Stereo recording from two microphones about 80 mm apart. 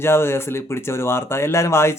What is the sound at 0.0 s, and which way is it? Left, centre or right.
Speech, left.